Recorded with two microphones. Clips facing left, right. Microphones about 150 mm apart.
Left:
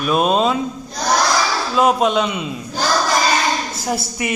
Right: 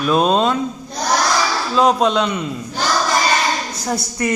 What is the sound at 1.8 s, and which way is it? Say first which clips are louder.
Speech: right 1 dB; 5° left (ahead or behind).